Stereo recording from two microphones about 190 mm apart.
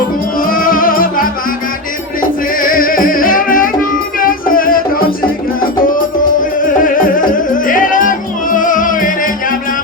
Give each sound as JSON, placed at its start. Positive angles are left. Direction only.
{"t": 0.3, "sound": "music", "side_deg": 50}
{"t": 2.6, "sound": "music", "side_deg": 45}
{"t": 6.4, "sound": "music", "side_deg": 45}